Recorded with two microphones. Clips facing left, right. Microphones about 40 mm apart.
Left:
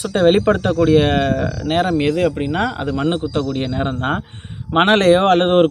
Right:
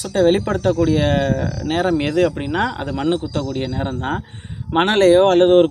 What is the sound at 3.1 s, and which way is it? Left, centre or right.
Speech, left.